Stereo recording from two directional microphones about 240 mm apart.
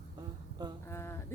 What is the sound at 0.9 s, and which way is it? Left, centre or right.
Speech, centre.